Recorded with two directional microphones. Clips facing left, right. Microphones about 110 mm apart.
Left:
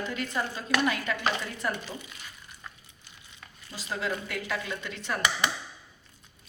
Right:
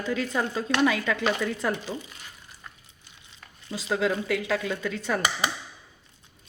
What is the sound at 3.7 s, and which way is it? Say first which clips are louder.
A woman's voice: right 7 dB; 90° right.